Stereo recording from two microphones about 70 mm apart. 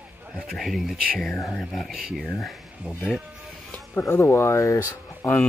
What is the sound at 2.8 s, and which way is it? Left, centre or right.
Speech, centre.